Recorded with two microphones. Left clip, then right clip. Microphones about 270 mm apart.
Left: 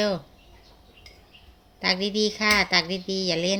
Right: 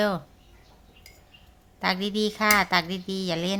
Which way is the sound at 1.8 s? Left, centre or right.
Right.